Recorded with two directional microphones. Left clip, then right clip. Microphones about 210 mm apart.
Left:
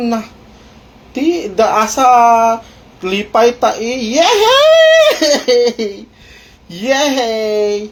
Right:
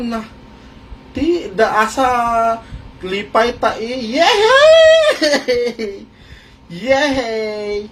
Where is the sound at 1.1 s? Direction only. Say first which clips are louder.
Left 2 dB; 25° left (ahead or behind).